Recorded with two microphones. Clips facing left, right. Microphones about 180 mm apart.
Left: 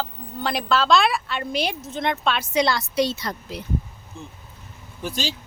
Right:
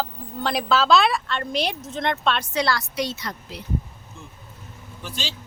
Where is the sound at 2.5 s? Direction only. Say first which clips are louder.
Left 3 dB; 20° left (ahead or behind).